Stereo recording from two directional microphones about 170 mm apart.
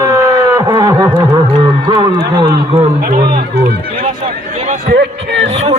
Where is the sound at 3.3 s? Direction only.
70° right (ahead or behind).